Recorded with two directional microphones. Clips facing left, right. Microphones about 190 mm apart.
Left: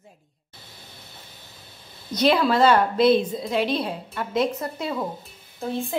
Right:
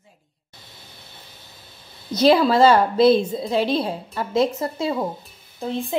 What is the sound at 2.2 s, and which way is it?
A woman's voice, 30° right (ahead or behind).